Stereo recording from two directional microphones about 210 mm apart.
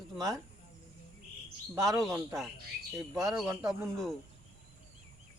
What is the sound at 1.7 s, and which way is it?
Speech, 15° right (ahead or behind).